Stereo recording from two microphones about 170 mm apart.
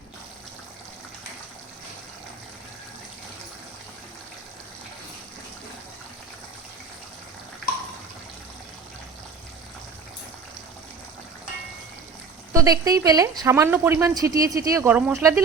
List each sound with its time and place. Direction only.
12.5 s speech: 20° right (ahead or behind)